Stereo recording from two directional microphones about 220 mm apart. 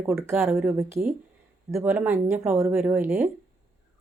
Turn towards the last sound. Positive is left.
turn(degrees=-10)  # may be behind; listen again after turning